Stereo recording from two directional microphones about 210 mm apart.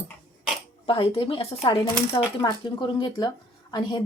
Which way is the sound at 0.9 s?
25° left (ahead or behind).